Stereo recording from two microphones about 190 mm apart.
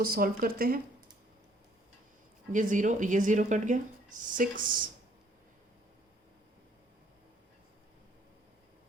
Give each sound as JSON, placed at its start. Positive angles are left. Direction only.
{"t": 0.0, "sound": "speech", "side_deg": -50}
{"t": 2.5, "sound": "a woman's voice", "side_deg": -40}